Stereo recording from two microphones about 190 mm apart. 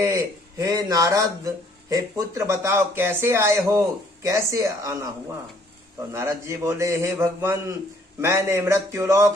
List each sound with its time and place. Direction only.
0.6 s speech: 20° right (ahead or behind)
6.1 s speech: 15° right (ahead or behind)